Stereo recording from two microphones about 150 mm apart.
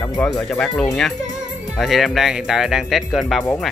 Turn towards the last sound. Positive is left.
turn(degrees=0)  # may be behind; listen again after turning